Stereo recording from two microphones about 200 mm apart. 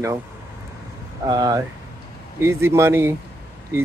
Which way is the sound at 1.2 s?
20° right (ahead or behind).